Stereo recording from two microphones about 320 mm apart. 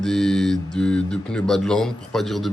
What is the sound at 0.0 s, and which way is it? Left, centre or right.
Speech, centre.